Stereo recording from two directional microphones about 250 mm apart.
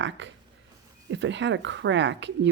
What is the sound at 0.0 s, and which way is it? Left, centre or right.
Speech, right.